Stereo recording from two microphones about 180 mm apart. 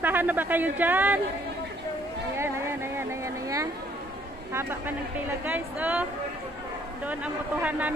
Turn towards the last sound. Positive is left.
turn(degrees=-10)  # may be behind; listen again after turning